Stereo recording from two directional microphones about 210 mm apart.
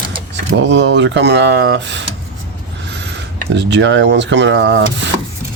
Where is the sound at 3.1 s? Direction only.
55° right (ahead or behind).